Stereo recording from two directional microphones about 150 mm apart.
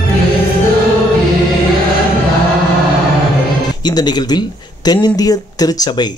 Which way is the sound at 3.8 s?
30° left (ahead or behind).